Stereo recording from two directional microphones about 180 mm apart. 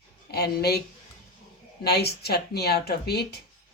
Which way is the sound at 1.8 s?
60° left (ahead or behind).